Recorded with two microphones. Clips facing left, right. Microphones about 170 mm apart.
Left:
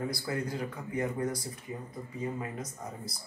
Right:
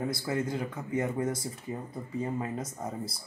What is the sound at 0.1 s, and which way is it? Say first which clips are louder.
Speech: right 3 dB; 20° right (ahead or behind).